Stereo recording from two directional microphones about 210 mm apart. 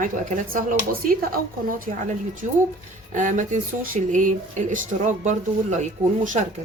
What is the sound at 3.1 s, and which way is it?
Speech, 35° right (ahead or behind).